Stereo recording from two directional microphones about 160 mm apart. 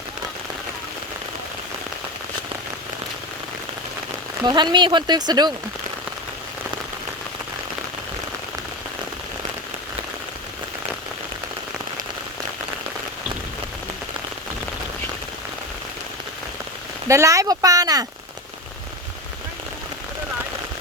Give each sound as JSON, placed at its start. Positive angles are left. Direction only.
{"t": 4.4, "sound": "speech", "side_deg": -30}
{"t": 17.1, "sound": "speech", "side_deg": -20}